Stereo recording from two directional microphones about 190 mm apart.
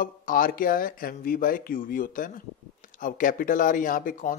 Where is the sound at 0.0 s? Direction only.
45° left (ahead or behind).